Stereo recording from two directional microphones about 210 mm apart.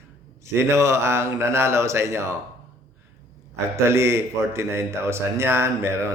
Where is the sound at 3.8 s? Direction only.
10° right (ahead or behind).